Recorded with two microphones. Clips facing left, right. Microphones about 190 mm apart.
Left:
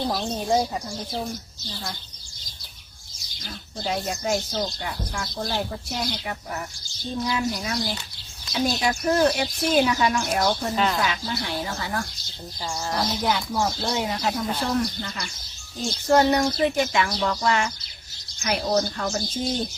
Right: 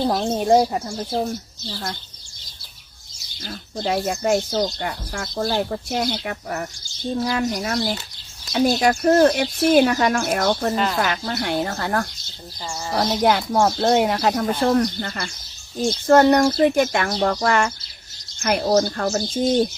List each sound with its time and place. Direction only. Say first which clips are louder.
0.3 s speech: right 7 dB; 60° right (ahead or behind)
3.4 s speech: right 5 dB; 55° right (ahead or behind)
10.8 s a woman's voice: right 2 dB; centre (ahead or behind)
11.0 s speech: right 4 dB; 55° right (ahead or behind)
12.6 s a woman's voice: right 2 dB; centre (ahead or behind)
13.2 s speech: right 9 dB; 55° right (ahead or behind)